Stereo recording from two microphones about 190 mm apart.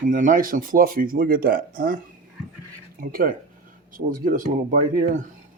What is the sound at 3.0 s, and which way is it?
Speech, 50° right (ahead or behind).